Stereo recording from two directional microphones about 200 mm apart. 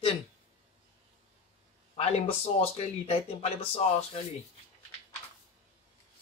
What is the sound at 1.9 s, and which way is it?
Speech, 30° left (ahead or behind).